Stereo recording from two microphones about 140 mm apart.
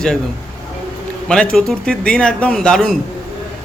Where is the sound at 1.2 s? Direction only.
5° left (ahead or behind).